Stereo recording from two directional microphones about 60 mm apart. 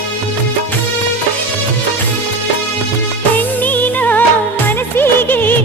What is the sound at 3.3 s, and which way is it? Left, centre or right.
Music, left.